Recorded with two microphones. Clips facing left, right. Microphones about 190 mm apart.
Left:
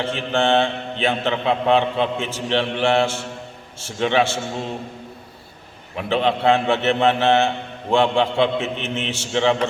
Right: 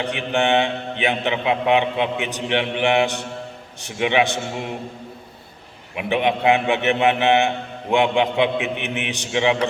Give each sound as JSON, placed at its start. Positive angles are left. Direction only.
{"t": 0.0, "sound": "a man's voice", "side_deg": -15}
{"t": 6.0, "sound": "a man's voice", "side_deg": -15}